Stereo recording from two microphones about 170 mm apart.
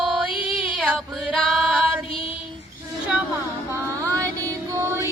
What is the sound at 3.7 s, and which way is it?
Music, 20° right (ahead or behind).